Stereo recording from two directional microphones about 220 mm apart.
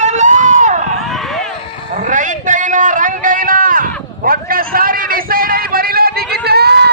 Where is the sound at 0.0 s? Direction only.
35° right (ahead or behind).